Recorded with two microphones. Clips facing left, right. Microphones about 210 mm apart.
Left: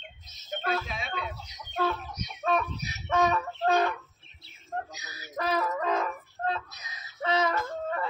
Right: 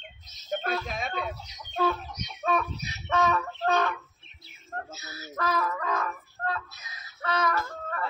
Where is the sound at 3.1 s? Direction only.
15° left (ahead or behind).